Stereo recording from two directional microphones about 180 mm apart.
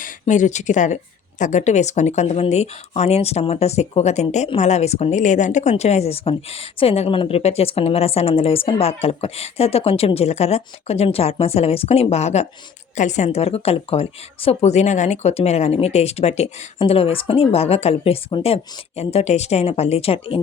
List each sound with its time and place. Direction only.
0.0 s speech: 45° left (ahead or behind)